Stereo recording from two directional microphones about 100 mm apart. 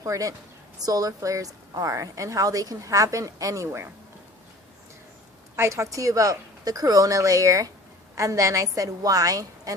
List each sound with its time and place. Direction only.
0.0 s a woman's voice: 35° right (ahead or behind)
5.5 s a woman's voice: 30° right (ahead or behind)